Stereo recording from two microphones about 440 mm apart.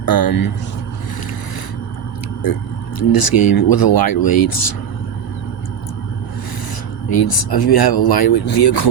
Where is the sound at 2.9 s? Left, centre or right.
Left.